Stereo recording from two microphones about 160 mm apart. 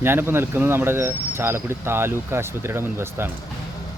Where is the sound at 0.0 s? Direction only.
15° right (ahead or behind).